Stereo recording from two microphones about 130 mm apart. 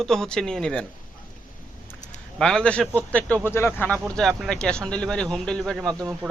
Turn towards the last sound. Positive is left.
turn(degrees=-10)  # may be behind; listen again after turning